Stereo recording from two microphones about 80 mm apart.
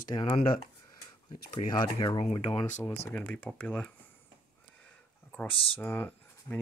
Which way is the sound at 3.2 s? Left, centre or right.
Left.